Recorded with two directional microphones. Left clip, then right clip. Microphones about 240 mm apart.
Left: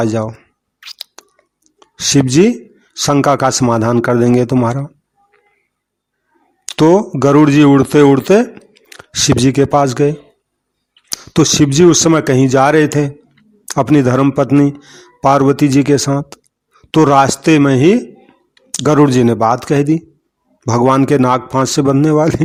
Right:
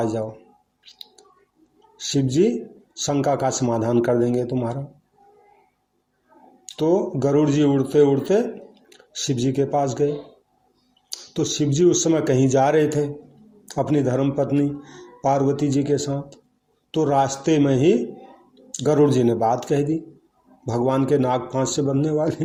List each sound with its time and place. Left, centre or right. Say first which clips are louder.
0.0 s speech: left 8 dB; left
0.8 s chewing: left 13 dB; left
2.0 s speech: left 9 dB; left
6.7 s speech: left 10 dB; left
11.1 s speech: left 12 dB; left